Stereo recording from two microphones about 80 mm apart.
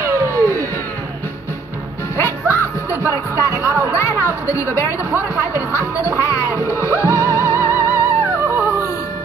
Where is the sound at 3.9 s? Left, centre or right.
Left.